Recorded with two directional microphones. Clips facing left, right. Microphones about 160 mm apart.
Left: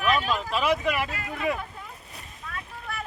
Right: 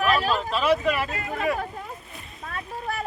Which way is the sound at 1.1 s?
25° right (ahead or behind).